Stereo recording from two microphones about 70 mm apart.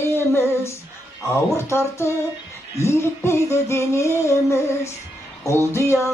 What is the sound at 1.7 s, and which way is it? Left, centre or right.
Music, left.